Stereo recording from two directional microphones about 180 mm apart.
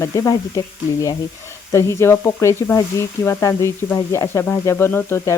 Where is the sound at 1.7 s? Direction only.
15° left (ahead or behind).